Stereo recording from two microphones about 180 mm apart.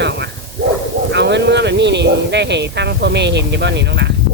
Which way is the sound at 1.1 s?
70° right (ahead or behind).